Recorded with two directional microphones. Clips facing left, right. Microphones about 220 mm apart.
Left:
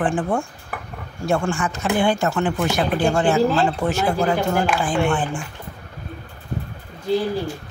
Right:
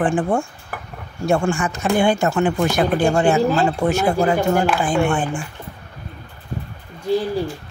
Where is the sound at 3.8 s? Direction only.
25° right (ahead or behind).